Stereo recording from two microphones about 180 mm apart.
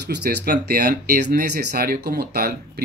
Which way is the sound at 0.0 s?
65° right (ahead or behind).